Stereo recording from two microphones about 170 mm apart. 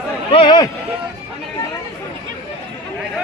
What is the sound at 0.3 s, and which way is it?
Speech, 30° left (ahead or behind).